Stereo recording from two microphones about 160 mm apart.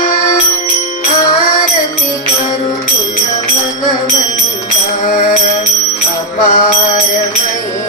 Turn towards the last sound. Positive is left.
turn(degrees=55)  # may be behind; listen again after turning